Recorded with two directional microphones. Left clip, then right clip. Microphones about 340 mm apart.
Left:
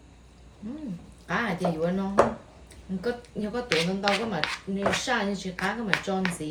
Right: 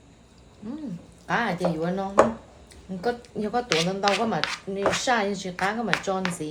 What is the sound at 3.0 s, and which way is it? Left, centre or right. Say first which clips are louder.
A woman's voice: right 4 dB; centre.